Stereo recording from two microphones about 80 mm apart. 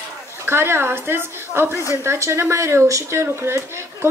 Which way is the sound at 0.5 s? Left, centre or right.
Right.